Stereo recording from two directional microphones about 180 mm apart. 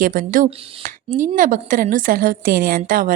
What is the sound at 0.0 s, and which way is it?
A woman's voice, 50° right (ahead or behind).